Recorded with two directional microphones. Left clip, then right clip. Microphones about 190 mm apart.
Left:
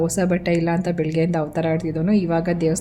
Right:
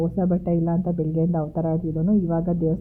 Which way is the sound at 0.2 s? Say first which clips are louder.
Left 4 dB; 5° left (ahead or behind).